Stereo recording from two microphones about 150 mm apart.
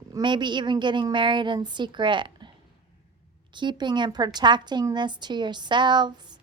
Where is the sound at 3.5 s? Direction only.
30° right (ahead or behind).